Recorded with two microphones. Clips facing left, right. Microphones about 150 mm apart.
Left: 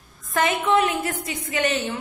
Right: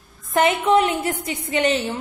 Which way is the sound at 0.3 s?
25° right (ahead or behind).